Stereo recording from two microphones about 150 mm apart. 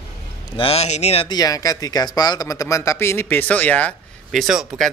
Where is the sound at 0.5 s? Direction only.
40° left (ahead or behind).